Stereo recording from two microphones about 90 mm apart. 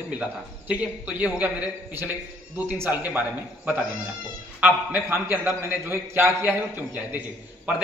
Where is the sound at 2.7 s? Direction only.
25° right (ahead or behind).